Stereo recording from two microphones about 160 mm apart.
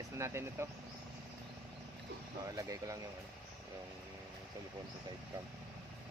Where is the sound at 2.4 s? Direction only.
20° right (ahead or behind).